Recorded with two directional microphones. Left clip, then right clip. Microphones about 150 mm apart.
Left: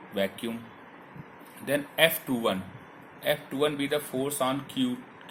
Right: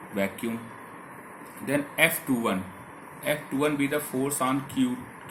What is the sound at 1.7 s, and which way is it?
Speech, 55° left (ahead or behind).